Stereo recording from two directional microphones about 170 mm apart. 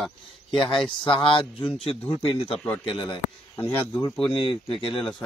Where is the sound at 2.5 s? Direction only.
5° left (ahead or behind).